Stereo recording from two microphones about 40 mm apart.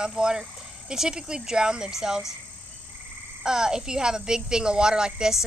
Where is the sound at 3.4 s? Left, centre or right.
Centre.